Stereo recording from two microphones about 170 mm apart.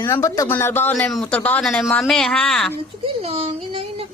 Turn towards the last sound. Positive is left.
turn(degrees=-35)  # may be behind; listen again after turning